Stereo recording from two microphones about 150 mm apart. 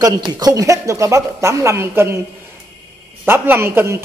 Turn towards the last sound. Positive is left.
turn(degrees=-15)  # may be behind; listen again after turning